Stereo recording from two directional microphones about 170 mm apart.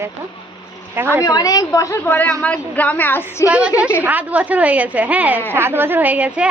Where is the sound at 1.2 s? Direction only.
20° left (ahead or behind).